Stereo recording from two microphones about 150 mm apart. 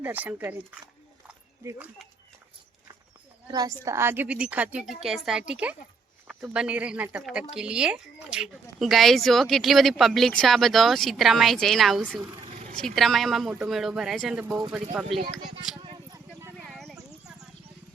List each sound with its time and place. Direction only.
0.0 s a woman's voice: 10° right (ahead or behind)
3.5 s a woman's voice: 25° right (ahead or behind); by 12.1 s centre (ahead or behind)
12.5 s vehicle: 45° right (ahead or behind)
12.7 s speech: 5° left (ahead or behind)
15.8 s a sound: 30° right (ahead or behind)
16.6 s a sound: centre (ahead or behind)